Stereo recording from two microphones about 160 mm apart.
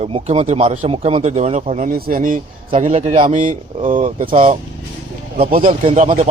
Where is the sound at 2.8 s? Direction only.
50° right (ahead or behind).